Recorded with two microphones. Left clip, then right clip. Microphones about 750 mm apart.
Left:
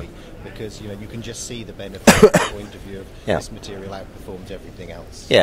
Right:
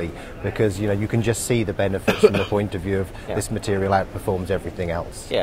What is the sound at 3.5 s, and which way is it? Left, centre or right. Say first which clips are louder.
Speech: right 12 dB; right.